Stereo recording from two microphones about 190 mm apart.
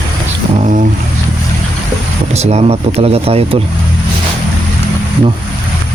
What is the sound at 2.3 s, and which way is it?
Speech, 35° right (ahead or behind).